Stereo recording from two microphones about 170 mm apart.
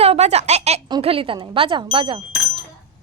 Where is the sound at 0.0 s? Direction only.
40° right (ahead or behind).